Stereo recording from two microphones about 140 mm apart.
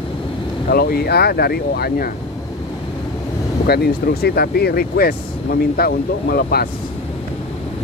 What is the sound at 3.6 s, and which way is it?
Speech, 90° left.